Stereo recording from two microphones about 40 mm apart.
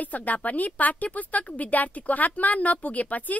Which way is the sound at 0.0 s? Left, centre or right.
Left.